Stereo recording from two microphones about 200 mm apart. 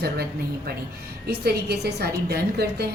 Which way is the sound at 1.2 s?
55° right (ahead or behind).